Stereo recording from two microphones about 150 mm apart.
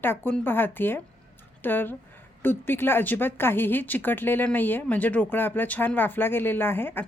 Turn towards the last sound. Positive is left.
turn(degrees=15)  # may be behind; listen again after turning